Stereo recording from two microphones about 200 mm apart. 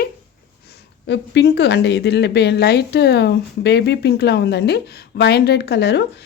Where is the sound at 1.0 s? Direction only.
55° left (ahead or behind).